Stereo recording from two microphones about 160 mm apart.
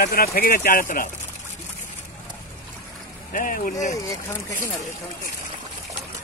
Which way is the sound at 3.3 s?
55° left (ahead or behind).